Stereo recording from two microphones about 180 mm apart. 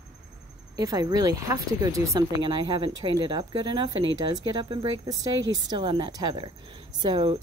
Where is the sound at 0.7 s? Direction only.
20° right (ahead or behind).